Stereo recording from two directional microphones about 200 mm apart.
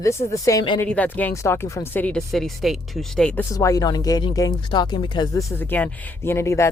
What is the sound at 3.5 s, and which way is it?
Speech, 15° left (ahead or behind).